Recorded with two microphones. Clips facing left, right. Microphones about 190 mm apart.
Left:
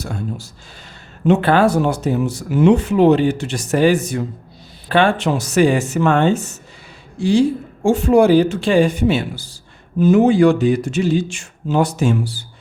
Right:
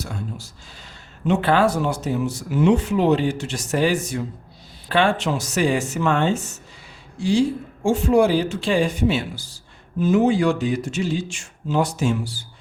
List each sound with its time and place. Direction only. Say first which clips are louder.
1.3 s speech: left 5 dB; 55° left (ahead or behind)